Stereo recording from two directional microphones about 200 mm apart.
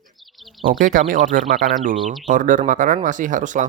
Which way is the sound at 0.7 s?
45° right (ahead or behind).